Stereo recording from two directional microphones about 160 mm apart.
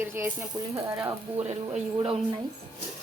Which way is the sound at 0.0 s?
15° right (ahead or behind).